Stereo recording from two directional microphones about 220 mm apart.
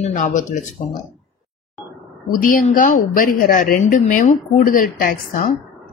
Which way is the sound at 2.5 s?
35° left (ahead or behind).